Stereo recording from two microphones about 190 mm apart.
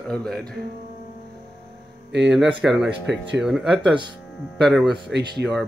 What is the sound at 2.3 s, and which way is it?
Speech, 5° right (ahead or behind).